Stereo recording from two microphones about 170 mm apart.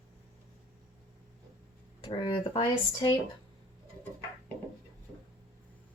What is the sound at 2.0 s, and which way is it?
Speech, 30° left (ahead or behind).